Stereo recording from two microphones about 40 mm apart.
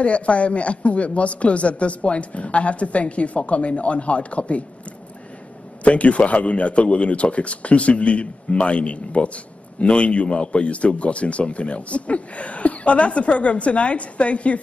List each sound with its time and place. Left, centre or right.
0.0 s speech: left
5.9 s speech: left